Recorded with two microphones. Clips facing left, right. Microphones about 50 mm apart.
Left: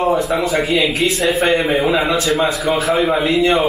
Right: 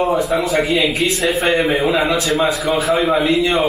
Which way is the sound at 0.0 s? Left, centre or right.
Centre.